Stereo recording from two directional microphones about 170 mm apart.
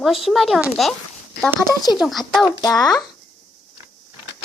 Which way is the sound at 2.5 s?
20° left (ahead or behind).